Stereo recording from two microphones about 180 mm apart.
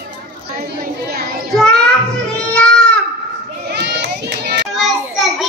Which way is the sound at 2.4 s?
5° left (ahead or behind).